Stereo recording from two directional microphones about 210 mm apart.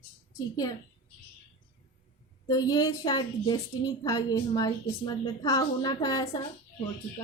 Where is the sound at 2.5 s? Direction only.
20° left (ahead or behind).